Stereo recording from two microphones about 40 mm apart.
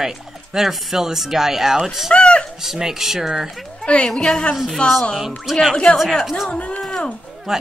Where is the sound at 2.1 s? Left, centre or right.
Left.